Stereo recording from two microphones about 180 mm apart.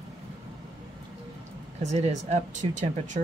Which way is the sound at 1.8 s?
40° right (ahead or behind).